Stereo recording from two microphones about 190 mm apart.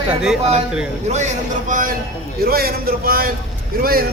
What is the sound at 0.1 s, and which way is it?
Speech, 5° right (ahead or behind).